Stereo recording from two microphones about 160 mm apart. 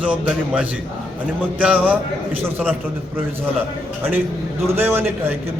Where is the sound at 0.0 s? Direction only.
10° right (ahead or behind).